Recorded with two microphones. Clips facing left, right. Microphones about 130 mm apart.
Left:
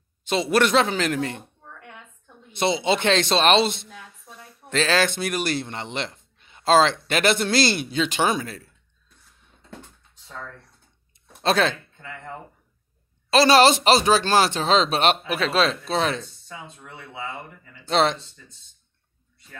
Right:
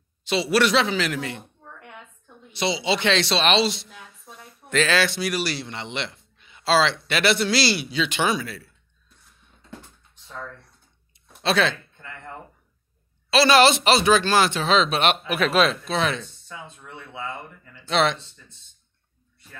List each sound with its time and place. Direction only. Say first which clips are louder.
0.2 s a man's voice: even; 50° left (ahead or behind)
2.5 s a man's voice: left 2 dB; 50° left (ahead or behind)
4.6 s a man's voice: even; 35° left (ahead or behind)
11.4 s a man's voice: left 1 dB; 45° left (ahead or behind)
13.3 s speech: left 1 dB; 40° left (ahead or behind)
17.8 s speech: left 1 dB; 35° left (ahead or behind)